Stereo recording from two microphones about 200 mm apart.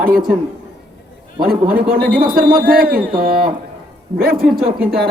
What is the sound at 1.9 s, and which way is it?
A man's voice, 45° right (ahead or behind).